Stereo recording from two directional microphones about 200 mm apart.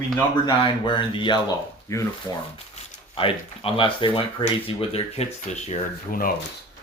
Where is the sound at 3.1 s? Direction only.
25° left (ahead or behind).